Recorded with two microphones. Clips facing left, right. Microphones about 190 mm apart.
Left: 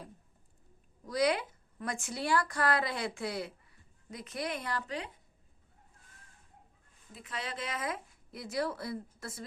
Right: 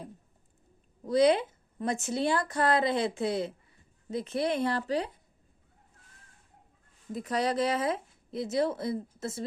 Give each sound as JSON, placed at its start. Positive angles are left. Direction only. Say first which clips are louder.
{"t": 1.0, "sound": "a woman's voice", "louder": "right 7 dB", "side_deg": -25}
{"t": 7.1, "sound": "a woman's voice", "louder": "right 12 dB", "side_deg": -40}